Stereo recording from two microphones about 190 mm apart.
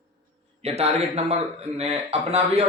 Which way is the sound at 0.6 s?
35° right (ahead or behind).